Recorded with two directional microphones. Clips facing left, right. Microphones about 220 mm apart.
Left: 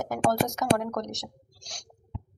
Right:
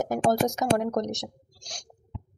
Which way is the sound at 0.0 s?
20° right (ahead or behind).